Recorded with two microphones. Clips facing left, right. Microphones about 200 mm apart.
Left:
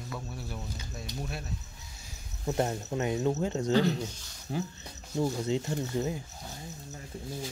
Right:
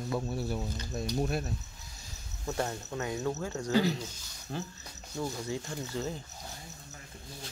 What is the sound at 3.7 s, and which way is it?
Speech, 5° right (ahead or behind).